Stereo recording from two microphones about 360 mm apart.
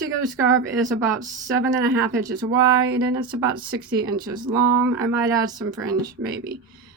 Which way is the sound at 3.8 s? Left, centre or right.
Right.